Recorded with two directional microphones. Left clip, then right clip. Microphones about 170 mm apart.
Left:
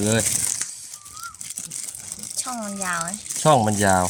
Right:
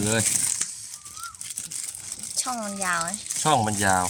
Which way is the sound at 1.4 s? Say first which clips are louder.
Left 1 dB; 75° left (ahead or behind).